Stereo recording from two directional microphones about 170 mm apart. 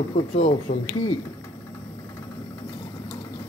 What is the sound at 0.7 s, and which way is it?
Speech, 55° left (ahead or behind).